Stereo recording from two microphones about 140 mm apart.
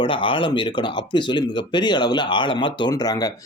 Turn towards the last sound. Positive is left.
turn(degrees=25)  # may be behind; listen again after turning